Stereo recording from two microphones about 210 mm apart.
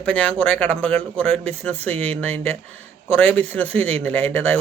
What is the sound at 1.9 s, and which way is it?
Speech, 30° right (ahead or behind).